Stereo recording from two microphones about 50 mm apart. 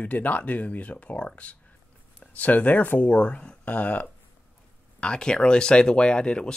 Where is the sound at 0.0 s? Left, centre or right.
Left.